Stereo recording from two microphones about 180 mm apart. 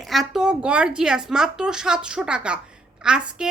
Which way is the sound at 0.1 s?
Centre (ahead or behind).